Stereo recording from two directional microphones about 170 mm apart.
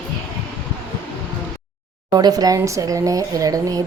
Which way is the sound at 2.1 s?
25° right (ahead or behind).